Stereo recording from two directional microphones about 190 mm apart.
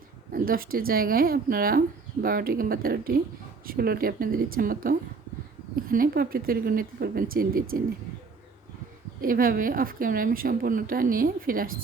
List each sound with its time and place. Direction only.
0.3 s a woman's voice: 50° right (ahead or behind)
9.2 s a woman's voice: 45° right (ahead or behind)